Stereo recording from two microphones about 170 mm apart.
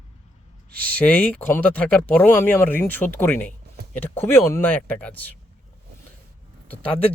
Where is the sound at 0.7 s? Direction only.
60° right (ahead or behind).